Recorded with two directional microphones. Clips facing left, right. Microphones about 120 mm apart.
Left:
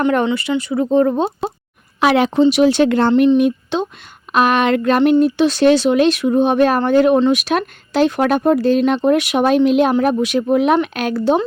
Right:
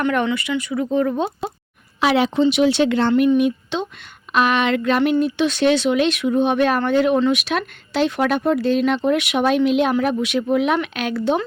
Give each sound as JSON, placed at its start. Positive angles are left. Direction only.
{"t": 0.3, "sound": "speech", "side_deg": 30}
{"t": 2.0, "sound": "speech", "side_deg": 55}